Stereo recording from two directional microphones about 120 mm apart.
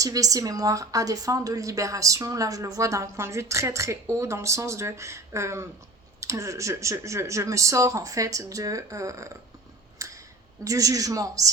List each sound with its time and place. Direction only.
0.0 s a woman's voice: 30° right (ahead or behind)
10.0 s a sound: 25° right (ahead or behind)
10.6 s a woman's voice: 30° right (ahead or behind)